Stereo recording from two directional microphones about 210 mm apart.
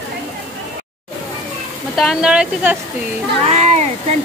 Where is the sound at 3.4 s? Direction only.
35° right (ahead or behind).